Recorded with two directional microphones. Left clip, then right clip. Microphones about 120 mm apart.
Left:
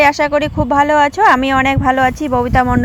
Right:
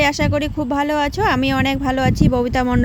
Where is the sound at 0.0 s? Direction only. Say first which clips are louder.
Left 6 dB; 10° right (ahead or behind).